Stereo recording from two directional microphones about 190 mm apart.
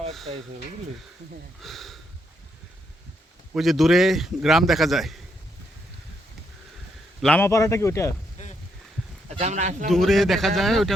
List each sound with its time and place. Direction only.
1.6 s a man's voice: centre (ahead or behind)
3.5 s a man's voice: centre (ahead or behind)
7.2 s a man's voice: 5° left (ahead or behind)
8.4 s boat: 40° left (ahead or behind)
9.3 s speech: 35° right (ahead or behind)
9.9 s a man's voice: centre (ahead or behind)